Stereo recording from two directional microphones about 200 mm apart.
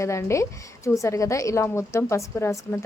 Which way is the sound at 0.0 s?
15° left (ahead or behind).